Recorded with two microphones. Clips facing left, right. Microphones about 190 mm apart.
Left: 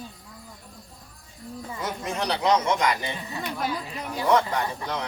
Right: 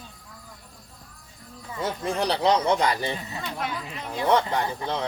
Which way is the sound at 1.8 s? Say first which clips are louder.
Right 4 dB; 30° right (ahead or behind).